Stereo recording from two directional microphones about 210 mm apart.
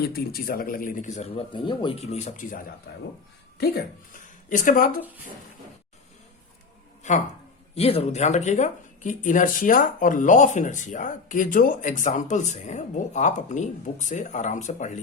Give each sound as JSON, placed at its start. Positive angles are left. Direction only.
{"t": 0.0, "sound": "speech", "side_deg": 45}
{"t": 2.0, "sound": "speech", "side_deg": 35}
{"t": 2.9, "sound": "speech", "side_deg": 55}
{"t": 3.6, "sound": "speech", "side_deg": 45}
{"t": 7.8, "sound": "speech", "side_deg": 30}